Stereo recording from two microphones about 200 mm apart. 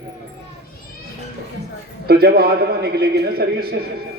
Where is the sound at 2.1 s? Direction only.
50° right (ahead or behind).